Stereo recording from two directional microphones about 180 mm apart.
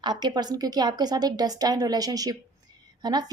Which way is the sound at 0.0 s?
25° right (ahead or behind).